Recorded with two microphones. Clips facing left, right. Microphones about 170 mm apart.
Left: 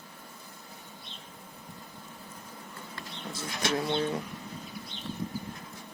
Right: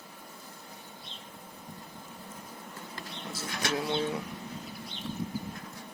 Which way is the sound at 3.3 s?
5° right (ahead or behind).